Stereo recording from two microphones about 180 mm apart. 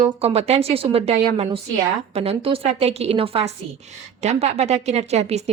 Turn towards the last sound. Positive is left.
turn(degrees=-35)  # may be behind; listen again after turning